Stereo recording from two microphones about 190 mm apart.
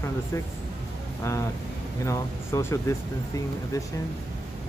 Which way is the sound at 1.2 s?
15° left (ahead or behind).